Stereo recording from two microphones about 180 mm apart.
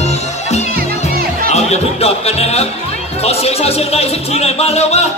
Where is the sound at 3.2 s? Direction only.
35° left (ahead or behind).